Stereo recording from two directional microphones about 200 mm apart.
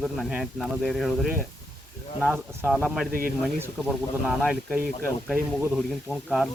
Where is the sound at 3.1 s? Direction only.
45° right (ahead or behind).